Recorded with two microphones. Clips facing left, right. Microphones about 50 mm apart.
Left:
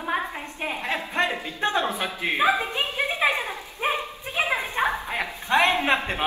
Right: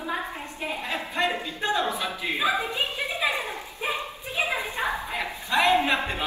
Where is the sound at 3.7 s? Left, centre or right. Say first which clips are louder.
Left 5 dB; left.